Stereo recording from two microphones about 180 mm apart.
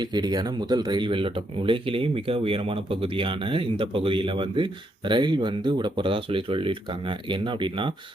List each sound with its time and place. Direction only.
0.0 s speech: 25° right (ahead or behind)